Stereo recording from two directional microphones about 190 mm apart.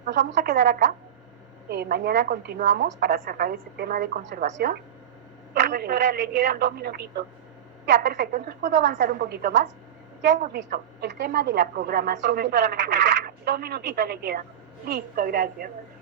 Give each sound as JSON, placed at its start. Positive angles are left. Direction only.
{"t": 0.0, "sound": "a woman's voice", "side_deg": -65}